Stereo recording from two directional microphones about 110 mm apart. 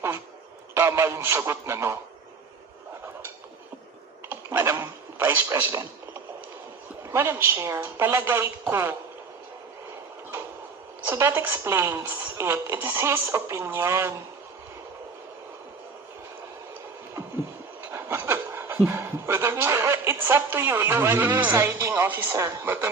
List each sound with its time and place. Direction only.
0.7 s a woman's voice: 20° right (ahead or behind)
4.3 s a sound: 20° right (ahead or behind)
7.1 s a woman's voice: 20° right (ahead or behind)
11.0 s a woman's voice: 20° right (ahead or behind)
17.9 s dog: 20° right (ahead or behind)
18.9 s a woman's voice: 20° right (ahead or behind)